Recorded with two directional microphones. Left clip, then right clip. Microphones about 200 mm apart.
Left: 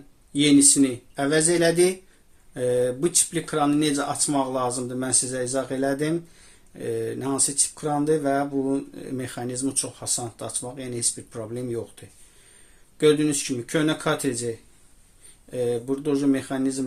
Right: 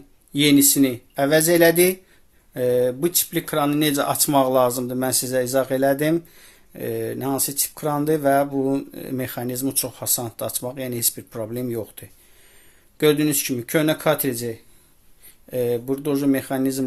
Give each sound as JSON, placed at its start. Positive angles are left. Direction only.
{"t": 0.3, "sound": "speech", "side_deg": -35}